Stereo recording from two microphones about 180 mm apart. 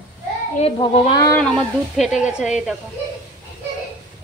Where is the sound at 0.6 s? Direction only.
35° left (ahead or behind).